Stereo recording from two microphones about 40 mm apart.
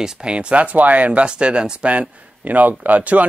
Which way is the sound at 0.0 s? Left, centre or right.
Right.